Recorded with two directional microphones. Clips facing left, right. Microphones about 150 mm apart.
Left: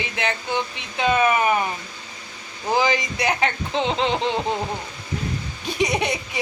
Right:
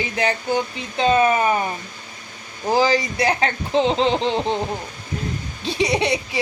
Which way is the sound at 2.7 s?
35° right (ahead or behind).